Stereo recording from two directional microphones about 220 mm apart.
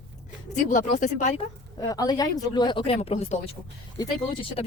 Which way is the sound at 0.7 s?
35° left (ahead or behind).